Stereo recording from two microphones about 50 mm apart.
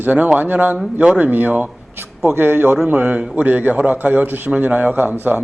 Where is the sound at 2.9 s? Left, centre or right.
Right.